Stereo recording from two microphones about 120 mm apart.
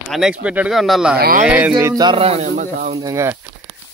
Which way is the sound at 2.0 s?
55° right (ahead or behind).